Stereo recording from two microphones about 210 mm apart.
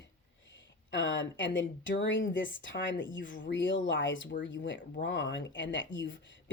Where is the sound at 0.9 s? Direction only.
60° left (ahead or behind).